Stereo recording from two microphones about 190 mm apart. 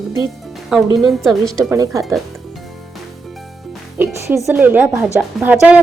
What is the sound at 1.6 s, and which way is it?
Speech, 15° right (ahead or behind).